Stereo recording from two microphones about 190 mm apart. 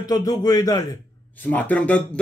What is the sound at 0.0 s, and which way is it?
Speech, 20° left (ahead or behind).